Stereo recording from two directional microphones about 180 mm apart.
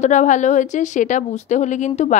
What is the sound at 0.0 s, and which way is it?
Speech, 40° left (ahead or behind).